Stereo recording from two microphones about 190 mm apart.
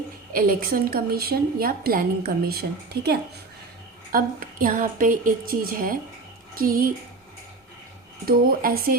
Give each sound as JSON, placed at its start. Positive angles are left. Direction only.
{"t": 0.3, "sound": "a woman's voice", "side_deg": -50}
{"t": 4.1, "sound": "a woman's voice", "side_deg": -45}
{"t": 8.3, "sound": "a woman's voice", "side_deg": -50}